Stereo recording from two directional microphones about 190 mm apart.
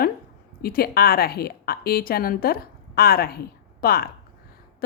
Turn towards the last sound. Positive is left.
turn(degrees=50)  # may be behind; listen again after turning